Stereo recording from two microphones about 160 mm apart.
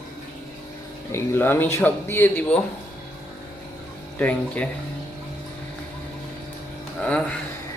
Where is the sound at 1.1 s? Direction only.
15° left (ahead or behind).